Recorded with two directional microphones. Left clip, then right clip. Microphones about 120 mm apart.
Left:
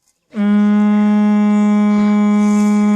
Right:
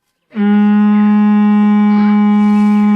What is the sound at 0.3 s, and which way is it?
Music, 50° left (ahead or behind).